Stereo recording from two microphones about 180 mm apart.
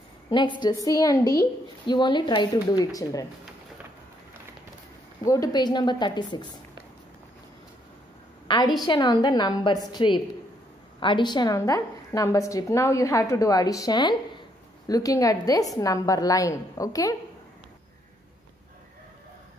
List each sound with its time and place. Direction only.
0.3 s a woman's voice: 25° left (ahead or behind)
5.2 s a woman's voice: 20° left (ahead or behind)
8.5 s a woman's voice: 25° left (ahead or behind)